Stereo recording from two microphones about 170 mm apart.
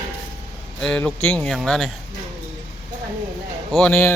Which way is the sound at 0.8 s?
5° left (ahead or behind).